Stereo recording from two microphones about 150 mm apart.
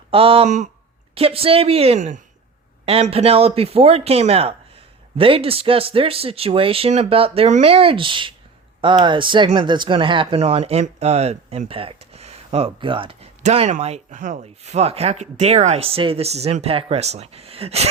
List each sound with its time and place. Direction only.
0.1 s speech: 40° right (ahead or behind)
1.1 s speech: 40° right (ahead or behind)
2.0 s speech: 55° right (ahead or behind)
2.8 s speech: 40° right (ahead or behind)
13.4 s speech: 50° right (ahead or behind)